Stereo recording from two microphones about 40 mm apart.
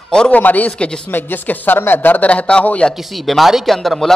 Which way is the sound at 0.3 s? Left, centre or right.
Left.